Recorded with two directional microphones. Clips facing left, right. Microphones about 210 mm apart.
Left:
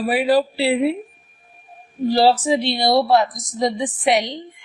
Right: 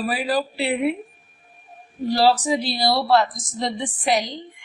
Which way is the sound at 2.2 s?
25° left (ahead or behind).